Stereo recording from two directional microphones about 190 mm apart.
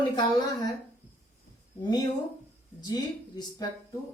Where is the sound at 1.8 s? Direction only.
20° left (ahead or behind).